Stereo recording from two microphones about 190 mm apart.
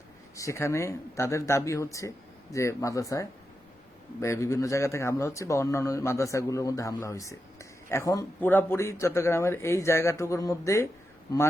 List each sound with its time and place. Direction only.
0.3 s speech: 15° left (ahead or behind)